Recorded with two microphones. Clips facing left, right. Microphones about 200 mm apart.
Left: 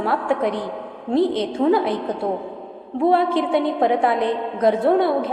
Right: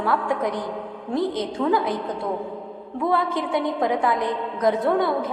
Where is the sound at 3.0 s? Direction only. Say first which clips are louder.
Left 6 dB; 30° left (ahead or behind).